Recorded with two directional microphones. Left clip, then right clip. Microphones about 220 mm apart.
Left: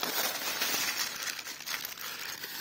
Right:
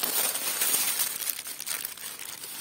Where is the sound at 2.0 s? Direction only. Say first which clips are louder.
Left 2 dB; 15° right (ahead or behind).